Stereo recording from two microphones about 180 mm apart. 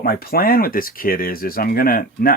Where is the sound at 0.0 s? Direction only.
55° left (ahead or behind).